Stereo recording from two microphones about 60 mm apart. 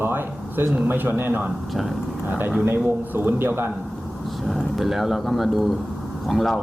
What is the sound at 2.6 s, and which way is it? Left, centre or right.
A man's voice, right.